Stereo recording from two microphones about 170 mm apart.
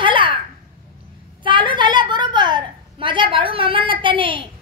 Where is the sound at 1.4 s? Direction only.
30° right (ahead or behind).